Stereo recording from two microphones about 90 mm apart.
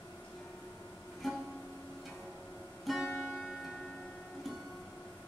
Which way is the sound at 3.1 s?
20° left (ahead or behind).